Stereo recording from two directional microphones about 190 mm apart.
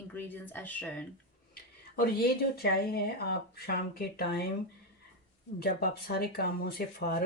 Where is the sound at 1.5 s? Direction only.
55° left (ahead or behind).